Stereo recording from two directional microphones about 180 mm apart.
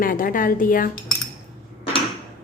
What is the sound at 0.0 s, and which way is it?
Speech, 50° left (ahead or behind).